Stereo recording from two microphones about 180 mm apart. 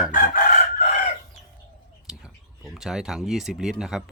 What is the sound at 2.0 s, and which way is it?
Speech, centre (ahead or behind).